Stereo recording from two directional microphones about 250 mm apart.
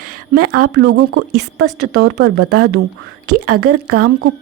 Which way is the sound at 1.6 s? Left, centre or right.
Right.